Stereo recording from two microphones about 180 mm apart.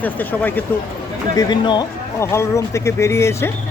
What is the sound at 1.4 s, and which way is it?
Speech, 25° left (ahead or behind).